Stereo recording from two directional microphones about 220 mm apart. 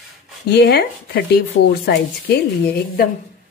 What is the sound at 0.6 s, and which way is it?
Speech, 45° left (ahead or behind).